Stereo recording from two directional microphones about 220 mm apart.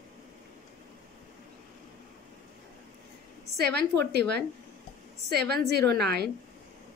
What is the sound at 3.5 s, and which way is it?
Speech, 45° right (ahead or behind).